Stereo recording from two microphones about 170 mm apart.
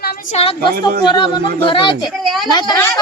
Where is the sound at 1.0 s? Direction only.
25° left (ahead or behind).